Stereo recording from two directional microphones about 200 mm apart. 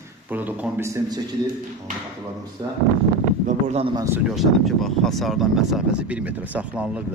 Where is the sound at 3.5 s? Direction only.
35° right (ahead or behind).